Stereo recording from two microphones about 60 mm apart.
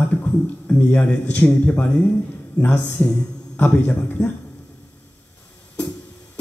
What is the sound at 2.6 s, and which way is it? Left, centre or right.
Speech, left.